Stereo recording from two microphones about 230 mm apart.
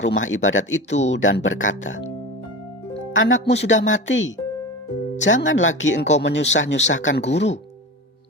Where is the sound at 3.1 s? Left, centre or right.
Left.